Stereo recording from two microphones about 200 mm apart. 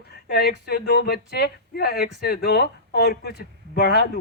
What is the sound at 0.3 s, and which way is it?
Speech, 50° left (ahead or behind).